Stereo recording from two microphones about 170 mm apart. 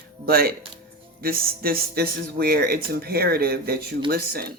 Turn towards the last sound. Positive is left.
turn(degrees=-60)  # may be behind; listen again after turning